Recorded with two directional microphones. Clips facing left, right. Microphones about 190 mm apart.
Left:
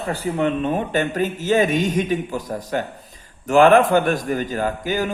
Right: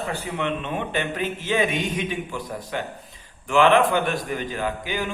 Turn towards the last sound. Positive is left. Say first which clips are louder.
# left 5 dB
turn(degrees=45)  # may be behind; listen again after turning